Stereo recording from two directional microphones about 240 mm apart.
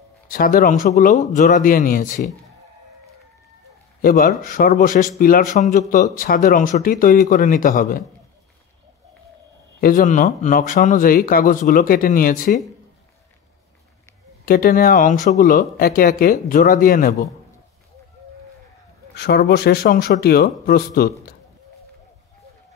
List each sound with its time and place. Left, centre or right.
0.3 s a man's voice: left
4.0 s a man's voice: left
9.8 s a man's voice: left
14.4 s a man's voice: left
19.1 s a man's voice: left